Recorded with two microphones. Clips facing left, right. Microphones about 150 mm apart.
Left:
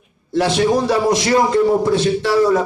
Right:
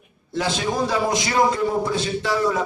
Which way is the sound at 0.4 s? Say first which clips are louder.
Left 7 dB; 70° left (ahead or behind).